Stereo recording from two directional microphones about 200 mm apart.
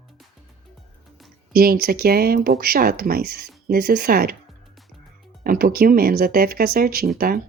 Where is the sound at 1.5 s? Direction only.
50° right (ahead or behind).